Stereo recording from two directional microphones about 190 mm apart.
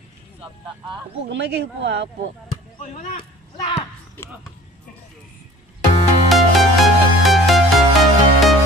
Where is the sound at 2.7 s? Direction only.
40° left (ahead or behind).